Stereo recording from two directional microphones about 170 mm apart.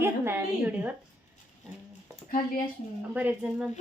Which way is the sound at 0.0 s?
15° right (ahead or behind).